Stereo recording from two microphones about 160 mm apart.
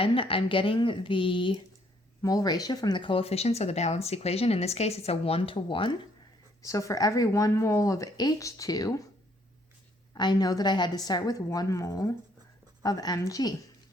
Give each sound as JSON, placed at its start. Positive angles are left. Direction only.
{"t": 0.0, "sound": "speech", "side_deg": 35}
{"t": 6.6, "sound": "speech", "side_deg": 20}
{"t": 10.2, "sound": "speech", "side_deg": 25}